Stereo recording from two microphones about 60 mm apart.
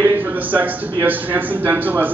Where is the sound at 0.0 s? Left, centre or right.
Right.